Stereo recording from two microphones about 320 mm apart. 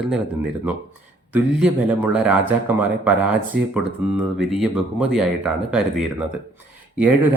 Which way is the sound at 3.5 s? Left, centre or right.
Right.